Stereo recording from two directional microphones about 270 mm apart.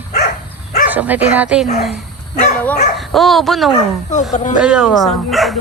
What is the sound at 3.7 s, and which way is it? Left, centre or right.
Speech, left.